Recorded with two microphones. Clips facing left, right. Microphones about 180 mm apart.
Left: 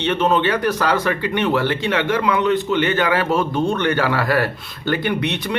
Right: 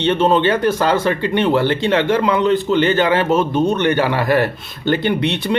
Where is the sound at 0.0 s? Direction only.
30° right (ahead or behind).